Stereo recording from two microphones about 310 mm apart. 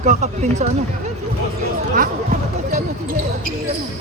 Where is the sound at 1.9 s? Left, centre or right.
Right.